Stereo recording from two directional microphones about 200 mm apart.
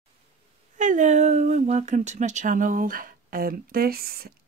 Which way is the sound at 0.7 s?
40° right (ahead or behind).